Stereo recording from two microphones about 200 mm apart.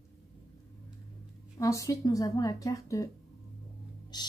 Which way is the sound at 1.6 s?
15° left (ahead or behind).